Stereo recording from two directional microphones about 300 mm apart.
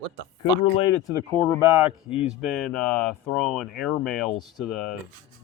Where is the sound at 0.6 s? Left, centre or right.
Centre.